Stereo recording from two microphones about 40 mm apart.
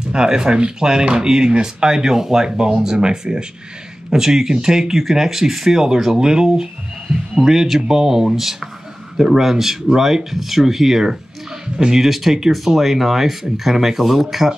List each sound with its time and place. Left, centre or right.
0.1 s speech: centre